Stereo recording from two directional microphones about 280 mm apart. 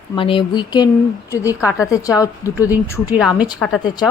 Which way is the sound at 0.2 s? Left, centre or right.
Centre.